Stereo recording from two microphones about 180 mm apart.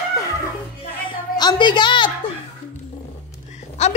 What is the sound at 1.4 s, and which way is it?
Speech, 25° left (ahead or behind).